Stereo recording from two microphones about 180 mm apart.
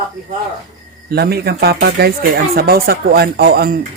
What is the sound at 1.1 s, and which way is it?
Speech, 60° right (ahead or behind).